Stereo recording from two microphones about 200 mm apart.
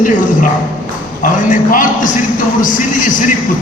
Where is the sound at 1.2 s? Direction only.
40° left (ahead or behind).